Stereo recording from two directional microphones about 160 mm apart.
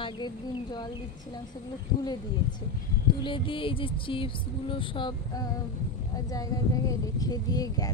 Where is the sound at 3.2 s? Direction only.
30° left (ahead or behind).